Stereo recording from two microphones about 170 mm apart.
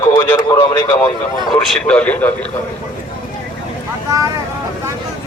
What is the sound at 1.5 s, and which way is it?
Speech, 5° left (ahead or behind).